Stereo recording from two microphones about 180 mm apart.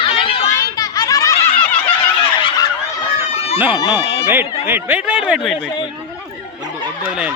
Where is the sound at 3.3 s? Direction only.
35° left (ahead or behind).